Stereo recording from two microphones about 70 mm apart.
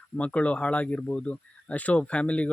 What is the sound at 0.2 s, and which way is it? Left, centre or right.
Speech, centre.